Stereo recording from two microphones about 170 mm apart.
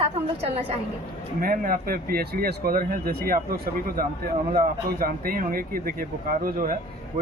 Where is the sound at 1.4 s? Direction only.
60° right (ahead or behind).